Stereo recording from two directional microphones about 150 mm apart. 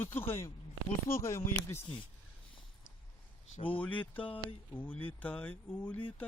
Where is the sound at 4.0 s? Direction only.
10° left (ahead or behind).